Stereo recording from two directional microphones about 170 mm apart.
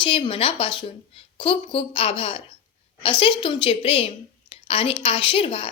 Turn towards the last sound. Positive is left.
turn(degrees=30)  # may be behind; listen again after turning